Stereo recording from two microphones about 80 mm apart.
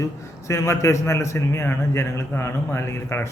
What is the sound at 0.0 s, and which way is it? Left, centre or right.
A man's voice, left.